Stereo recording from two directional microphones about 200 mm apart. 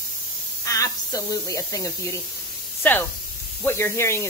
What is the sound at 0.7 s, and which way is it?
Speech, 15° left (ahead or behind).